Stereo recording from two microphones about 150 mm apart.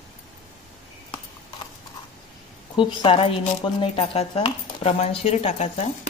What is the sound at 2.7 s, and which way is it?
Speech, 30° left (ahead or behind).